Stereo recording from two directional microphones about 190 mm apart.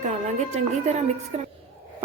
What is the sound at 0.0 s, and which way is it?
A woman's voice, 40° right (ahead or behind).